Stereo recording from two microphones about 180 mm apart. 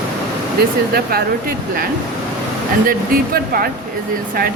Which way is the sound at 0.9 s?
55° right (ahead or behind).